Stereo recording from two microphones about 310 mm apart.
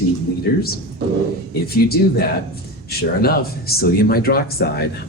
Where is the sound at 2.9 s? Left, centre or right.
Left.